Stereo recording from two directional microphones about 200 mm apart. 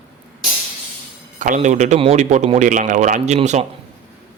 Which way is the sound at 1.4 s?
40° right (ahead or behind).